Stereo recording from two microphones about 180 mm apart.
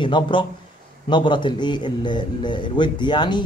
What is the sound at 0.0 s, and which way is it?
A man's voice, 25° left (ahead or behind).